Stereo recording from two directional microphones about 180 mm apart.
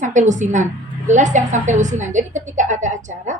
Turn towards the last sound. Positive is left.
turn(degrees=-45)  # may be behind; listen again after turning